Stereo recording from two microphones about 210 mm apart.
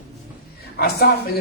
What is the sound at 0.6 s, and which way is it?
Speech, 50° left (ahead or behind).